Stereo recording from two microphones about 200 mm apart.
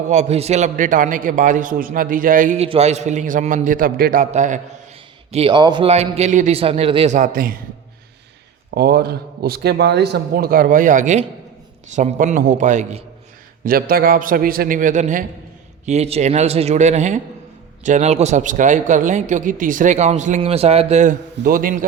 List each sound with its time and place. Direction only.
0.1 s speech: 35° right (ahead or behind)
5.3 s speech: 25° right (ahead or behind); by 7.6 s 45° right (ahead or behind)
8.7 s a man's voice: 50° right (ahead or behind); by 13.1 s 35° right (ahead or behind)
13.7 s a man's voice: 45° right (ahead or behind)